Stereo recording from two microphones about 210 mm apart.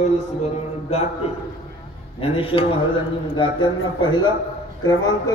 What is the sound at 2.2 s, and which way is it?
A man's voice, 25° left (ahead or behind).